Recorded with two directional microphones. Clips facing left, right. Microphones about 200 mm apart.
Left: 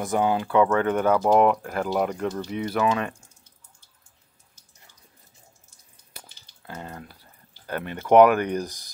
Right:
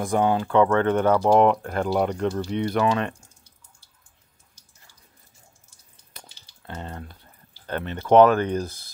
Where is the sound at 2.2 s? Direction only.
10° right (ahead or behind).